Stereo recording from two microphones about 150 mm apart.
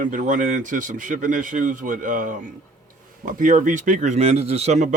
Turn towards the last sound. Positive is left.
turn(degrees=-45)  # may be behind; listen again after turning